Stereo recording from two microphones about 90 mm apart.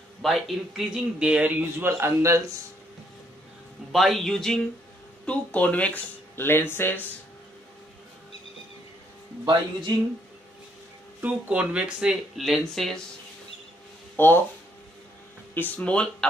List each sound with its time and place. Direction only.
0.2 s speech: centre (ahead or behind); by 1.9 s 20° right (ahead or behind)
1.9 s a man's voice: 30° right (ahead or behind)
3.9 s a man's voice: centre (ahead or behind); by 7.1 s 25° left (ahead or behind)
9.4 s speech: 60° right (ahead or behind)
11.1 s speech: 15° right (ahead or behind); by 13.0 s 5° left (ahead or behind)
14.1 s speech: 20° left (ahead or behind)
15.5 s speech: 20° left (ahead or behind)